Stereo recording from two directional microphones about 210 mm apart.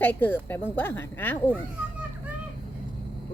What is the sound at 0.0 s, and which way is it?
Speech, 10° left (ahead or behind).